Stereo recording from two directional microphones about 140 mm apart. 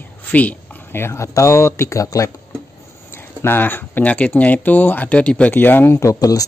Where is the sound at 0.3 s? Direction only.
10° left (ahead or behind).